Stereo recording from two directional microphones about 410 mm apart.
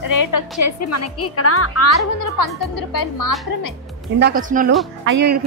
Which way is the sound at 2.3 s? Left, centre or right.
Left.